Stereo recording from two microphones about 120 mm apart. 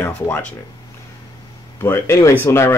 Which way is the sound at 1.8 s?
20° left (ahead or behind).